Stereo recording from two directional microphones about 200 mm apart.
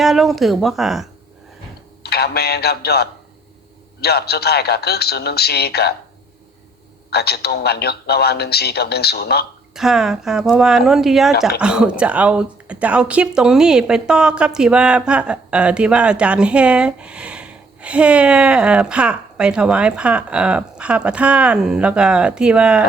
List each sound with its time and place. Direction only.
0.0 s speech: centre (ahead or behind)
2.0 s a man's voice: 55° left (ahead or behind)
7.1 s a man's voice: 55° left (ahead or behind)
9.7 s speech: centre (ahead or behind)